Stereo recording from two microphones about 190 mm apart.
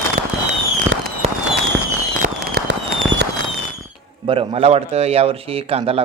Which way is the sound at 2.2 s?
55° right (ahead or behind).